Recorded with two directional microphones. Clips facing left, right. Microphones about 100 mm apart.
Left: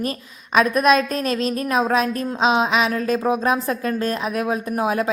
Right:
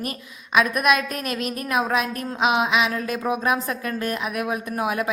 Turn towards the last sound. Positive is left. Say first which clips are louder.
# left 3 dB
turn(degrees=30)  # may be behind; listen again after turning